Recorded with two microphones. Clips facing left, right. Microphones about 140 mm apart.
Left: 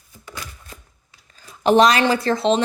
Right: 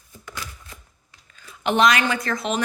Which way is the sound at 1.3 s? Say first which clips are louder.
Left 8 dB; 35° left (ahead or behind).